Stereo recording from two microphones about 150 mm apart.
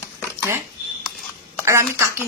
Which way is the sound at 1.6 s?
20° right (ahead or behind).